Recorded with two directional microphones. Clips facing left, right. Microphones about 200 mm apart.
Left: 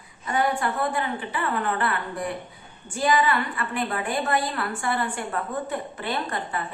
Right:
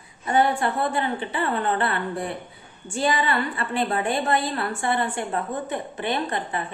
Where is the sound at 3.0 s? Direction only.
30° right (ahead or behind).